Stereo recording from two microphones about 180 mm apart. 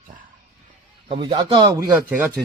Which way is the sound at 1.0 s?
30° right (ahead or behind).